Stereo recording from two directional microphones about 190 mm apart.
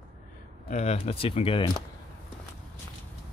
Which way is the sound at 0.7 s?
35° left (ahead or behind).